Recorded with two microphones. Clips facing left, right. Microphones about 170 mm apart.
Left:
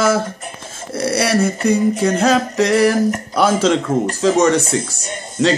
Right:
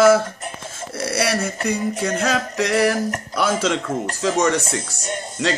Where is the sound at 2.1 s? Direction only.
30° left (ahead or behind).